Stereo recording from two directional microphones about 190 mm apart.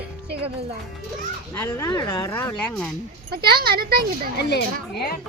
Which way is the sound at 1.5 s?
15° left (ahead or behind).